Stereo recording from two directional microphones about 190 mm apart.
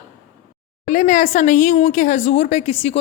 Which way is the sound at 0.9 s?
40° left (ahead or behind).